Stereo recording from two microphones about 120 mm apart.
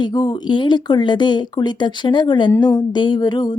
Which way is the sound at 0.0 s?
35° left (ahead or behind).